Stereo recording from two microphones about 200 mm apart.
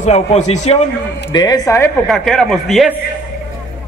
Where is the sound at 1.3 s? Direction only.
20° left (ahead or behind).